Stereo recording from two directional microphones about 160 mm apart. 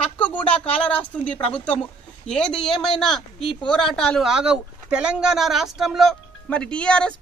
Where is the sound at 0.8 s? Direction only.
10° left (ahead or behind).